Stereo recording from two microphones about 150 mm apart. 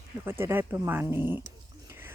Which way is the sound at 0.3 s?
15° right (ahead or behind).